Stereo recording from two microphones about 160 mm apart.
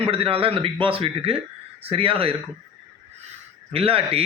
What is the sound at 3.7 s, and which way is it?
Speech, 35° right (ahead or behind).